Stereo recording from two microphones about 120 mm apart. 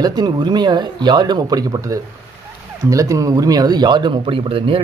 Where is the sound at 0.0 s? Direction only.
35° right (ahead or behind).